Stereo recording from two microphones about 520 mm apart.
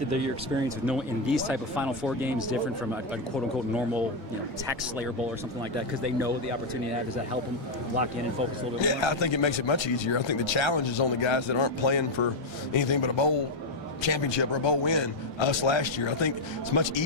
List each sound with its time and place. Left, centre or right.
0.6 s speech: centre
8.8 s speech: left